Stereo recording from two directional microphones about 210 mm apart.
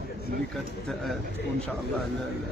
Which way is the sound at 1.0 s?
Centre (ahead or behind).